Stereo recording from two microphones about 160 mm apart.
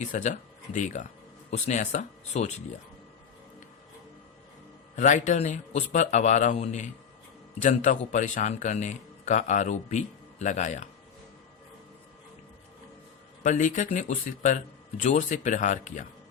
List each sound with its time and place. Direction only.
0.0 s a man's voice: 45° left (ahead or behind)
4.9 s a man's voice: 50° left (ahead or behind)
13.4 s a man's voice: 50° left (ahead or behind)